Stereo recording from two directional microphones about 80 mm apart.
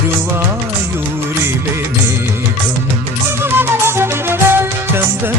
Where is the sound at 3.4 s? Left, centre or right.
Right.